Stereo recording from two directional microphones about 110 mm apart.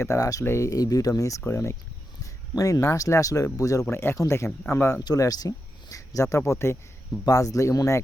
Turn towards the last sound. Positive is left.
turn(degrees=30)  # may be behind; listen again after turning